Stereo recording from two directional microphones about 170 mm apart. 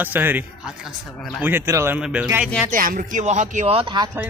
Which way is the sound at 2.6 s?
55° right (ahead or behind).